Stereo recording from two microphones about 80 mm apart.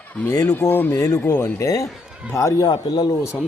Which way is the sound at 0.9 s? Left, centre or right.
Left.